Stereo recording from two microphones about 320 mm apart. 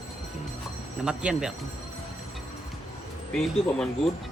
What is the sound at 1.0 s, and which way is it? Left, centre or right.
Speech, centre.